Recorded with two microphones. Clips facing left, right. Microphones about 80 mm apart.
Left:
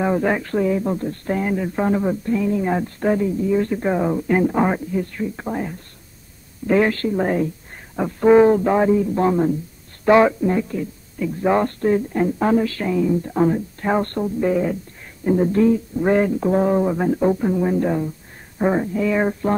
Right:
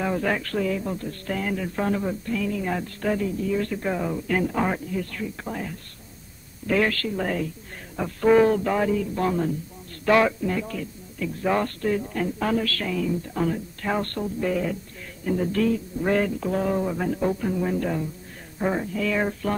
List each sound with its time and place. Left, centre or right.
0.0 s speech: left